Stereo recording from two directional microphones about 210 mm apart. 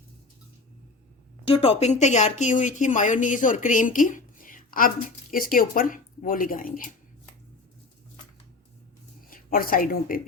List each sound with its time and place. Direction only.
1.5 s speech: 25° left (ahead or behind)
9.3 s speech: 45° left (ahead or behind)